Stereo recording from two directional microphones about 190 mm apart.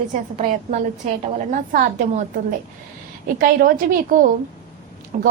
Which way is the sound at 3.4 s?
45° right (ahead or behind).